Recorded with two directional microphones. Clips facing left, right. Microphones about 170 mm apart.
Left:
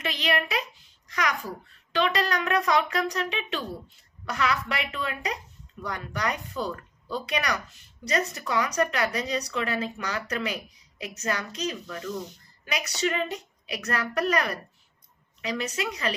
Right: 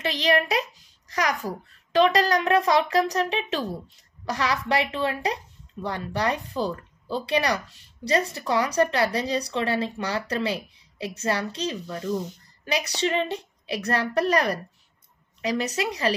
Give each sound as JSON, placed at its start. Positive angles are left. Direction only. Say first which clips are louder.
{"t": 0.0, "sound": "speech", "louder": "right 5 dB", "side_deg": -35}